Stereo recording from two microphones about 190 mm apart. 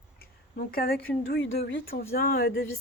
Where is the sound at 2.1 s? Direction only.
50° left (ahead or behind).